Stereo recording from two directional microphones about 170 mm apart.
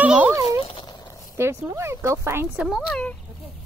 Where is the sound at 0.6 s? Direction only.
30° left (ahead or behind).